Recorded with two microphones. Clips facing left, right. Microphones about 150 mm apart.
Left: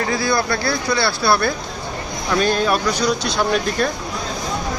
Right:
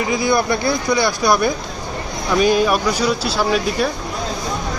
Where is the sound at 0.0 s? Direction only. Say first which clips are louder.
Right 2 dB; 15° right (ahead or behind).